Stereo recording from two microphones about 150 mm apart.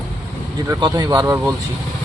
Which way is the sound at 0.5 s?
25° right (ahead or behind).